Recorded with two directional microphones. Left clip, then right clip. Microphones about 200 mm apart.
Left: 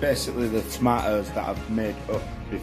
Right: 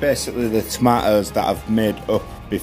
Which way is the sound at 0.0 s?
25° right (ahead or behind).